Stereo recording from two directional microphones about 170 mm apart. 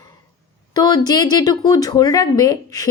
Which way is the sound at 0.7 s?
25° left (ahead or behind).